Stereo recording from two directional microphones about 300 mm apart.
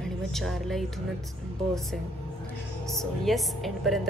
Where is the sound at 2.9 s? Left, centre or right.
Centre.